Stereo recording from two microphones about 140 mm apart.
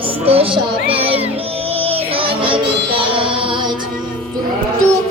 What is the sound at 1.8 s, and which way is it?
Music, 40° right (ahead or behind).